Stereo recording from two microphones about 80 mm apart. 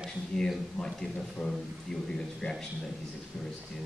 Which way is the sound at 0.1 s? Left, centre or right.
Centre.